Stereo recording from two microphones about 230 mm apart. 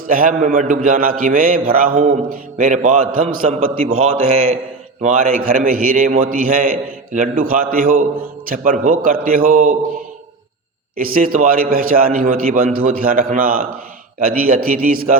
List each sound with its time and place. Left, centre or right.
0.1 s mantra: right
4.0 s a man's voice: right
5.0 s mantra: right
10.9 s mantra: right